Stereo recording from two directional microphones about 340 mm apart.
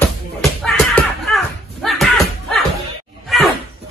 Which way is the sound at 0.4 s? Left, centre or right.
Centre.